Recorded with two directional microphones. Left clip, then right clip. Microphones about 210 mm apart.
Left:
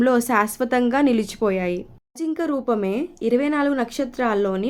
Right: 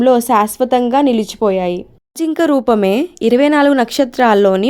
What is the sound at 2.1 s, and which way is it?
A woman's voice, 50° right (ahead or behind).